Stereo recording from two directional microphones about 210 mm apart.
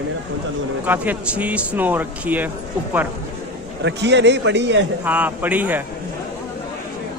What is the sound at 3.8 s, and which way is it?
A man's voice, 55° right (ahead or behind).